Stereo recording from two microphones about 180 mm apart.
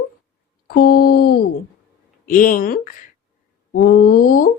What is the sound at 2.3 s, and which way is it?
Speech, 50° left (ahead or behind).